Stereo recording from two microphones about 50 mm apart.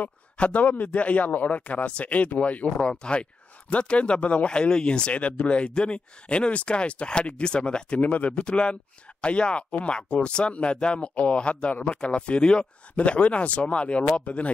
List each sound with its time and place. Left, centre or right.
0.0 s speech: left
2.8 s speech: centre